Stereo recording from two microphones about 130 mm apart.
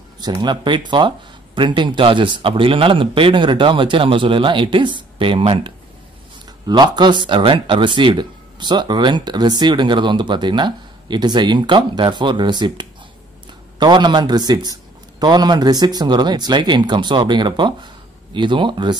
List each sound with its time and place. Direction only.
0.2 s speech: 35° right (ahead or behind)
6.7 s speech: 35° right (ahead or behind)